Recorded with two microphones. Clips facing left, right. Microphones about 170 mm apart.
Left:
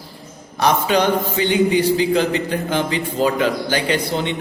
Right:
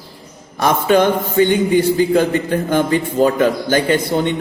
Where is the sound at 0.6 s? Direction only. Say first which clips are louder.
Right 3 dB; 50° right (ahead or behind).